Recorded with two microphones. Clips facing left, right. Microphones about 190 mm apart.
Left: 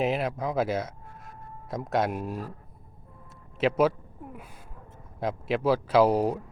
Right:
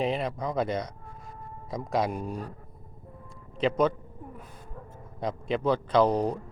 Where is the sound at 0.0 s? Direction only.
5° left (ahead or behind).